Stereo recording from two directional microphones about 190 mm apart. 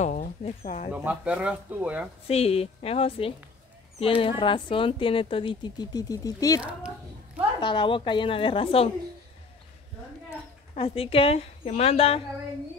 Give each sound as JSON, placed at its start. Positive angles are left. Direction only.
{"t": 0.0, "sound": "speech", "side_deg": 40}
{"t": 0.9, "sound": "speech", "side_deg": -5}
{"t": 2.2, "sound": "speech", "side_deg": 30}
{"t": 7.6, "sound": "speech", "side_deg": 25}
{"t": 10.7, "sound": "speech", "side_deg": 30}